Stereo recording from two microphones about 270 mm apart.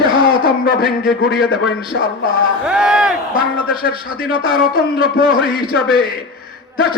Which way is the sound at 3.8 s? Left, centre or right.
Left.